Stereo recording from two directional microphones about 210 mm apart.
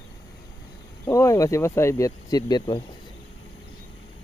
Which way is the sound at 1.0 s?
15° left (ahead or behind).